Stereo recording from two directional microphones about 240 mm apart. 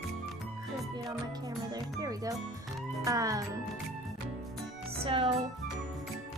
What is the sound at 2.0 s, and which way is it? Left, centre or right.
Speech, centre.